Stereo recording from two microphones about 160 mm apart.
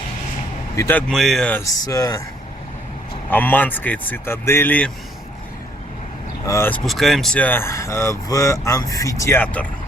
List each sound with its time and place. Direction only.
0.8 s speech: 10° left (ahead or behind)
1.6 s speech: 20° left (ahead or behind)
3.2 s speech: 10° left (ahead or behind)
6.4 s speech: 15° left (ahead or behind)
6.8 s speech: centre (ahead or behind)